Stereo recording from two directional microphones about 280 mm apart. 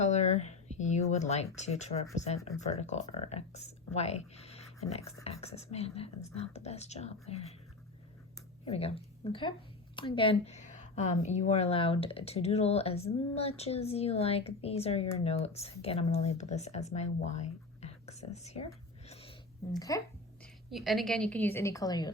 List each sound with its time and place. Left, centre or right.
0.0 s a sound: left
2.1 s speech: left
8.6 s speech: left
19.0 s a sound: left
19.9 s a woman's voice: centre
20.7 s a woman's voice: centre